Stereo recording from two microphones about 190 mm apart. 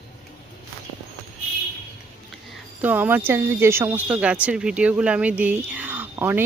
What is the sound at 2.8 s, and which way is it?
Speech, 10° right (ahead or behind).